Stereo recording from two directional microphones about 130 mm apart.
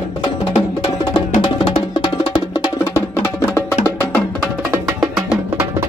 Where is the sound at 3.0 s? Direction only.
20° left (ahead or behind).